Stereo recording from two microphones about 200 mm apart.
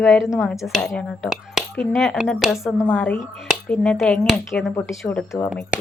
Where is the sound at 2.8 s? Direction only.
10° left (ahead or behind).